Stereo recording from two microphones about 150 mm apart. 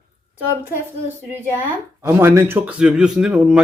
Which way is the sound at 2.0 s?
15° right (ahead or behind).